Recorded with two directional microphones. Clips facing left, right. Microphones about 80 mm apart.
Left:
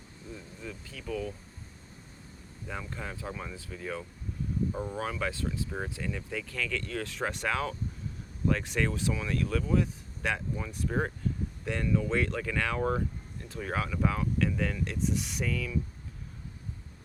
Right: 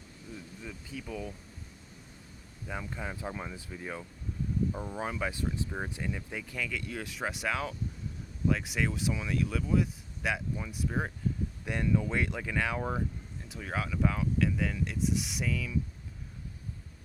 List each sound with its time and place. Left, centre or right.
0.3 s speech: centre
2.6 s speech: centre
4.7 s speech: centre
4.9 s speech: centre
11.6 s speech: centre
13.6 s speech: centre